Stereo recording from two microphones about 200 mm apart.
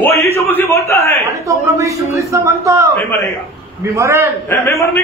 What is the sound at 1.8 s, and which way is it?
A woman's voice, 15° right (ahead or behind).